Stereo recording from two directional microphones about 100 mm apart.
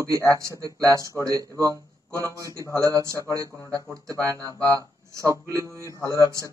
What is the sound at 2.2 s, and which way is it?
Speech, 35° right (ahead or behind).